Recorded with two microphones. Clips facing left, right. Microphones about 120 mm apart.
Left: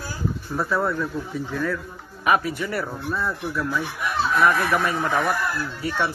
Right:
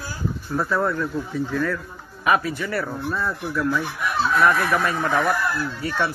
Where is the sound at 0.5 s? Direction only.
5° left (ahead or behind).